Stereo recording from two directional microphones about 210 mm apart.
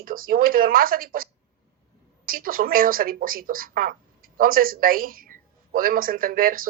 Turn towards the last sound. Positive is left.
turn(degrees=-45)  # may be behind; listen again after turning